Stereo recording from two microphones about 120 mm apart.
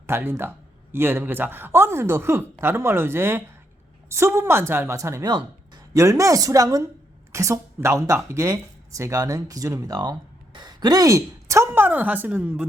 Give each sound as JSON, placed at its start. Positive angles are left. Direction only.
{"t": 0.1, "sound": "speech", "side_deg": -20}
{"t": 5.2, "sound": "a sound", "side_deg": -35}
{"t": 6.0, "sound": "speech", "side_deg": -25}